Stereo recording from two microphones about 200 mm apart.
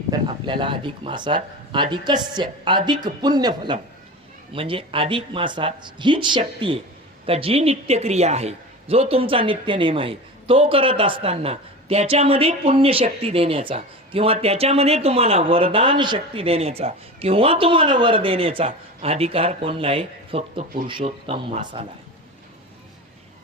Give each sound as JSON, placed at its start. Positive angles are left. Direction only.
{"t": 0.1, "sound": "a man's voice", "side_deg": -25}